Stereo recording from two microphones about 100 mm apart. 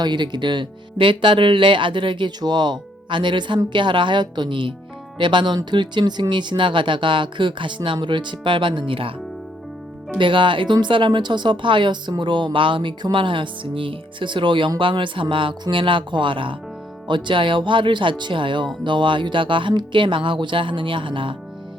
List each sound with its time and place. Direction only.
0.0 s speech: 50° right (ahead or behind)
10.2 s speech: 55° right (ahead or behind)